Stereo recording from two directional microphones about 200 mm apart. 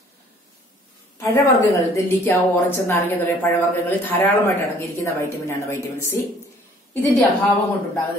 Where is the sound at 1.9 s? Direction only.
10° left (ahead or behind).